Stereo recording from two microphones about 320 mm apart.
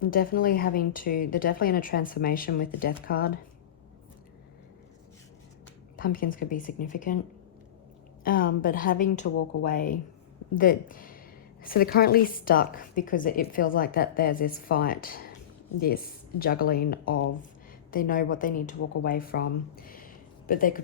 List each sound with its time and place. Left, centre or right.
0.0 s a woman's voice: left
6.0 s a woman's voice: left
8.2 s a woman's voice: left
19.7 s a sound: left